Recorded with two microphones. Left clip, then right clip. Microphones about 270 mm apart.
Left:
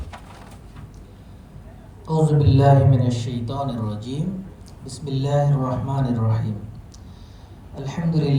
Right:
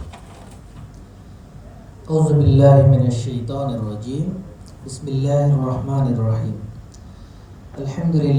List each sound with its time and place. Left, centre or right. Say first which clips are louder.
2.0 s a man's voice: right 3 dB; centre
8.1 s a man's voice: right 3 dB; centre